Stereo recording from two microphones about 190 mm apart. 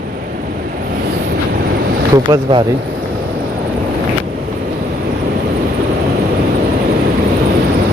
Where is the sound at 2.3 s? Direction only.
20° right (ahead or behind).